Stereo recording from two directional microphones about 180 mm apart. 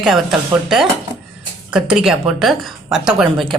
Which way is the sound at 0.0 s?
Centre (ahead or behind).